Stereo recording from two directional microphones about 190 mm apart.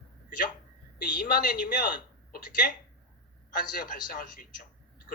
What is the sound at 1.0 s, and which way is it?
Speech, 45° left (ahead or behind).